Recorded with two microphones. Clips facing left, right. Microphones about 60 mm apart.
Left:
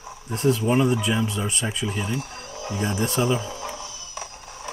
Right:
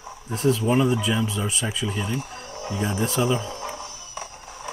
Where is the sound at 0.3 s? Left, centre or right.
Centre.